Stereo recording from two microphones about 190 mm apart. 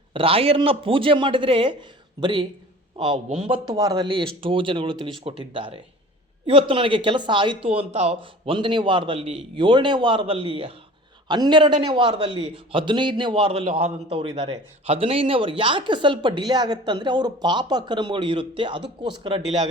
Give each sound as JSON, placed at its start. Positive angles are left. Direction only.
{"t": 0.1, "sound": "a man's voice", "side_deg": -30}